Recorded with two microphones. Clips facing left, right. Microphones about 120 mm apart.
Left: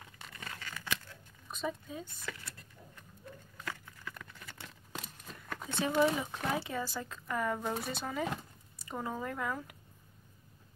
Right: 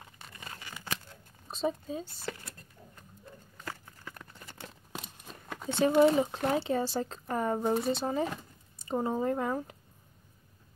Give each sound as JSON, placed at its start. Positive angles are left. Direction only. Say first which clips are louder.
{"t": 0.3, "sound": "tearing", "louder": "left 1 dB", "side_deg": -20}
{"t": 1.0, "sound": "a sound", "louder": "right 1 dB", "side_deg": -30}
{"t": 3.6, "sound": "clip-clop", "louder": "right 1 dB", "side_deg": -35}
{"t": 5.7, "sound": "speech", "louder": "right 6 dB", "side_deg": -30}